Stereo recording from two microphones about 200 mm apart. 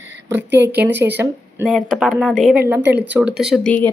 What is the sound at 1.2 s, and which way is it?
Speech, centre (ahead or behind).